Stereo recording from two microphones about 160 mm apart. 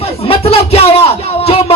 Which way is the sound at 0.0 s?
40° left (ahead or behind).